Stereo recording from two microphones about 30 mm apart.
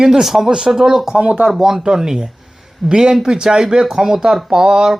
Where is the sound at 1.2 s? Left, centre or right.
Right.